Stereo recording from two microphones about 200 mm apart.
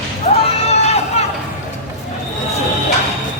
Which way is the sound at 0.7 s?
30° left (ahead or behind).